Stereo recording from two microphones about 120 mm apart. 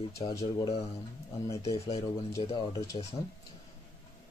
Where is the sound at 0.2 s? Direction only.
45° left (ahead or behind).